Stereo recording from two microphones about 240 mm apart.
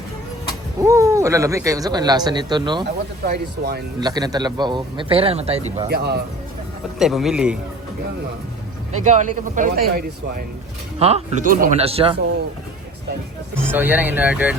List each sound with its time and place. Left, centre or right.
0.8 s speech: centre
3.2 s speech: right
4.0 s a man's voice: centre
5.9 s speech: right
7.0 s speech: centre
8.9 s speech: right
11.0 s a man's voice: right
13.7 s speech: centre